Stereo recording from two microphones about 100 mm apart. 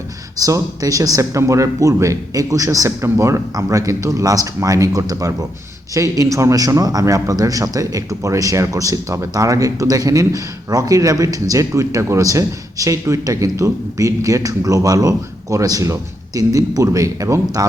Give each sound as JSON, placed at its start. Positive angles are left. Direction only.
{"t": 0.3, "sound": "a man's voice", "side_deg": -35}